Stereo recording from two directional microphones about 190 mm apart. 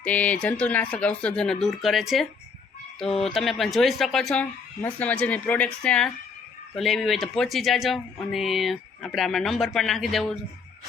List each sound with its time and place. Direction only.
0.0 s speech: 5° left (ahead or behind)
3.2 s speech: centre (ahead or behind)